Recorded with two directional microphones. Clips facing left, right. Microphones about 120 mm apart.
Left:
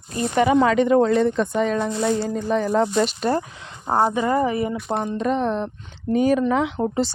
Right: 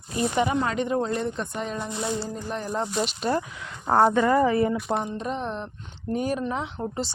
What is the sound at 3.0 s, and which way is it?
Speech, 45° left (ahead or behind).